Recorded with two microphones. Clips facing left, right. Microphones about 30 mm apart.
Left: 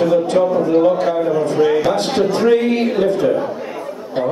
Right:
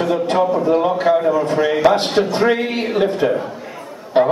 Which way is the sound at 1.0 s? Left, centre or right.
Centre.